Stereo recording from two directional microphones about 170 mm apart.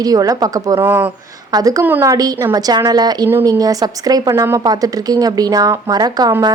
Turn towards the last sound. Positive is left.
turn(degrees=-20)  # may be behind; listen again after turning